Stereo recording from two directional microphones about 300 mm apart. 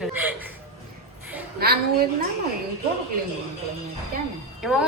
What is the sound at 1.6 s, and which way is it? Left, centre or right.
Speech, right.